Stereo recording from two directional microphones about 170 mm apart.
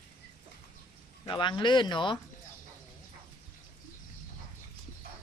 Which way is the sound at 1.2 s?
30° left (ahead or behind).